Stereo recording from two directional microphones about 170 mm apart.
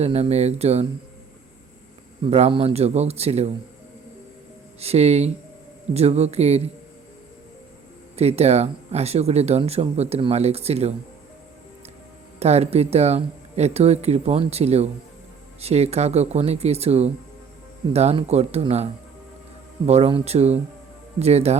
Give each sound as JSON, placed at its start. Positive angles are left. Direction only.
{"t": 0.0, "sound": "speech", "side_deg": -40}
{"t": 2.2, "sound": "speech", "side_deg": -35}
{"t": 4.8, "sound": "speech", "side_deg": -40}
{"t": 8.1, "sound": "speech", "side_deg": -40}
{"t": 12.4, "sound": "speech", "side_deg": -40}